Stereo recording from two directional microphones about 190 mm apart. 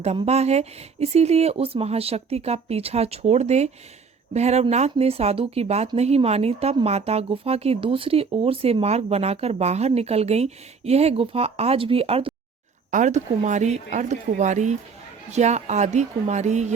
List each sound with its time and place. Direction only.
0.0 s speech: 35° right (ahead or behind)